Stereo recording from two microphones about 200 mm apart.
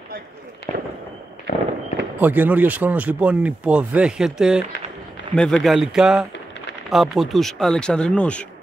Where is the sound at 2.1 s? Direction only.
10° right (ahead or behind).